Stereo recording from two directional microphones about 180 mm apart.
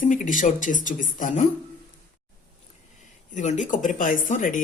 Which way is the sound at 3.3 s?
40° left (ahead or behind).